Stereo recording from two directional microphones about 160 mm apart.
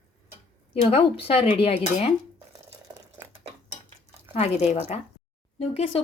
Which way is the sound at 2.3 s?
25° right (ahead or behind).